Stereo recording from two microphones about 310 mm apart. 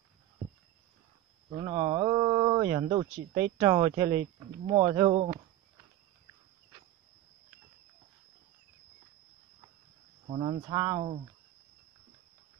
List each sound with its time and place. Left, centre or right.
1.6 s speech: centre
10.3 s speech: centre